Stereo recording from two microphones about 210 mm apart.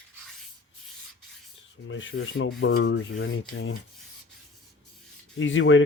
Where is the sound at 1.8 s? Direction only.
65° left (ahead or behind).